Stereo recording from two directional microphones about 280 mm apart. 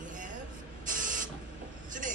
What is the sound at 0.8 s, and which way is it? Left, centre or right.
Printer, right.